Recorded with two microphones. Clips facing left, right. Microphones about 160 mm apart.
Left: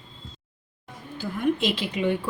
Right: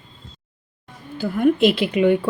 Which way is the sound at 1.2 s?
60° right (ahead or behind).